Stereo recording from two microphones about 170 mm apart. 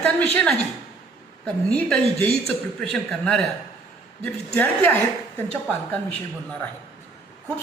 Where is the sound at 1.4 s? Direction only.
5° left (ahead or behind).